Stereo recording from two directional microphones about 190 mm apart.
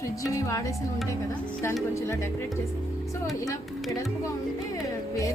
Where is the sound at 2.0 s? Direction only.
15° left (ahead or behind).